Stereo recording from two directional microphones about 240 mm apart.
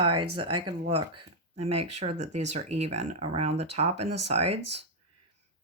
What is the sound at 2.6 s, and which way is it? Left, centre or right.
Speech, right.